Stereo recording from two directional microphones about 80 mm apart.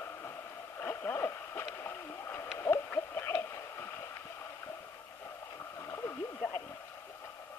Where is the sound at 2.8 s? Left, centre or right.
Left.